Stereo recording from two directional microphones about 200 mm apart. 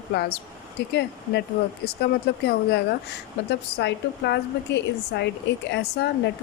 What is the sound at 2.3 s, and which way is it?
Speech, 60° left (ahead or behind).